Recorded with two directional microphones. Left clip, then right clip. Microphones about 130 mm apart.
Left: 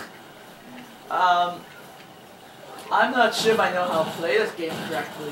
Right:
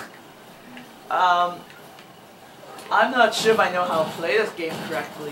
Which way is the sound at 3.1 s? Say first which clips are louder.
Right 2 dB; 5° left (ahead or behind).